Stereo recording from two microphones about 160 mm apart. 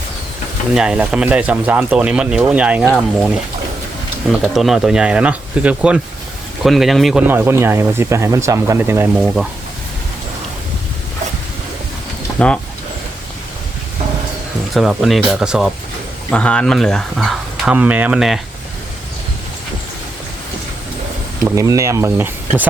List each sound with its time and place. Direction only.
0.7 s speech: 5° right (ahead or behind)
7.3 s speech: 15° right (ahead or behind)
9.2 s speech: centre (ahead or behind)
14.7 s speech: centre (ahead or behind)
21.4 s speech: 20° right (ahead or behind)